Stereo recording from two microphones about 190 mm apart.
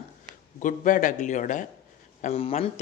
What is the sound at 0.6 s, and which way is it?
A man's voice, 45° left (ahead or behind).